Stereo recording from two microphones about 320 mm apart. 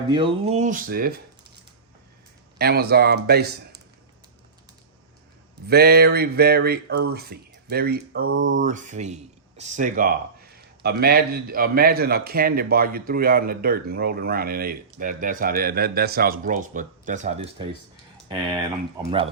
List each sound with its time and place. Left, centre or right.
0.1 s a man's voice: centre
2.6 s a man's voice: right
5.6 s a man's voice: right
8.5 s a man's voice: right